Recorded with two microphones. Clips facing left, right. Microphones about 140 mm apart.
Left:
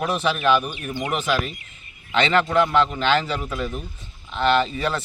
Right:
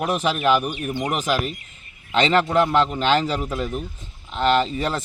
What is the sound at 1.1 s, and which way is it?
A man's voice, 40° right (ahead or behind).